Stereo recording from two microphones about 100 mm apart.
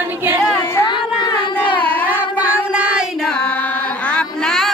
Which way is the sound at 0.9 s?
50° left (ahead or behind).